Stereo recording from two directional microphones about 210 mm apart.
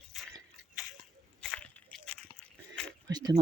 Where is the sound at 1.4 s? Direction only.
5° left (ahead or behind).